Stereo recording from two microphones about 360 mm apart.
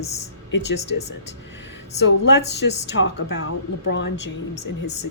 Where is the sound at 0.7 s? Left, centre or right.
Left.